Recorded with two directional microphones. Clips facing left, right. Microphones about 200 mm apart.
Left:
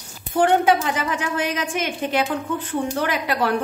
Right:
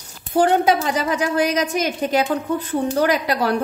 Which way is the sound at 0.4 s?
40° right (ahead or behind).